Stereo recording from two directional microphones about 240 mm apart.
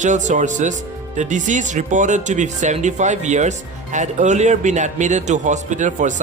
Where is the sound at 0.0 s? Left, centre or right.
Right.